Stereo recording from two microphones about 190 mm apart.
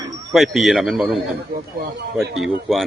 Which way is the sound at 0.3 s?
Centre (ahead or behind).